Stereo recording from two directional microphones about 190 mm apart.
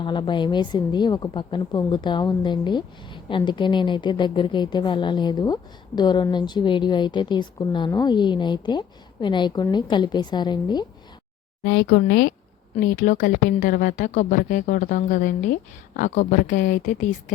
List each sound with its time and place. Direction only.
0.0 s a woman's voice: 25° left (ahead or behind)
11.6 s a woman's voice: 50° left (ahead or behind)